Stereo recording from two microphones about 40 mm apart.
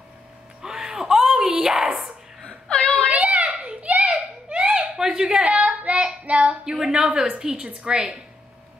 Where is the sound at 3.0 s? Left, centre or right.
Right; by 5.4 s centre.